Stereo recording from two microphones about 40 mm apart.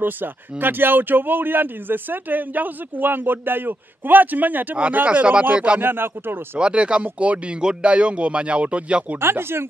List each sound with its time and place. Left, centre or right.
0.0 s speech: right
5.0 s speech: right
5.8 s speech: right
6.6 s speech: right
9.2 s speech: right